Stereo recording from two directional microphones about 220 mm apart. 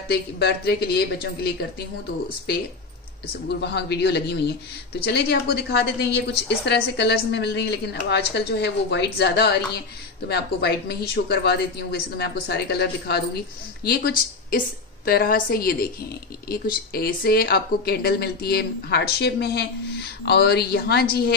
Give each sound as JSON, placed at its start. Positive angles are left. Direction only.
{"t": 0.1, "sound": "a woman's voice", "side_deg": 45}
{"t": 3.4, "sound": "a woman's voice", "side_deg": 50}
{"t": 15.0, "sound": "a woman's voice", "side_deg": 40}